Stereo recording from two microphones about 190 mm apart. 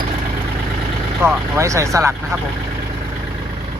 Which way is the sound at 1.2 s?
15° right (ahead or behind).